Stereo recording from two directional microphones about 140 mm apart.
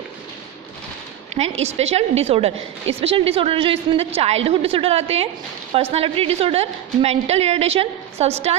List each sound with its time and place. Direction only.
1.4 s a woman's voice: 50° right (ahead or behind)